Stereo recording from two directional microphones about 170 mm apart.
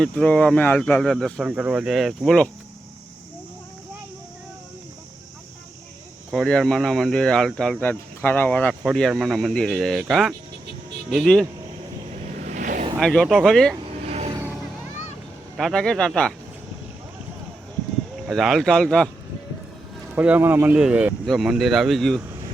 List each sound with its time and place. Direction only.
0.0 s speech: 5° left (ahead or behind)
6.3 s speech: centre (ahead or behind)
12.5 s vehicle: 50° right (ahead or behind)
13.0 s speech: centre (ahead or behind)
14.3 s music: 15° right (ahead or behind)
15.5 s speech: centre (ahead or behind)
18.3 s speech: centre (ahead or behind)
20.1 s speech: 10° right (ahead or behind)